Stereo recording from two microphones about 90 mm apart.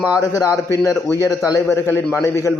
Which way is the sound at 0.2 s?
40° left (ahead or behind).